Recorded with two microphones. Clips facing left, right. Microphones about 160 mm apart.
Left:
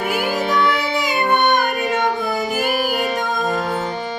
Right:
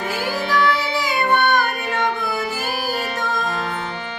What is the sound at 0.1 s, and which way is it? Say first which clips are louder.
Music: left 2 dB; 15° left (ahead or behind).